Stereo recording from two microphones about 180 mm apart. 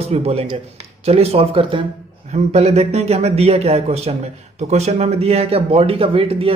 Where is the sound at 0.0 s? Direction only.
35° right (ahead or behind).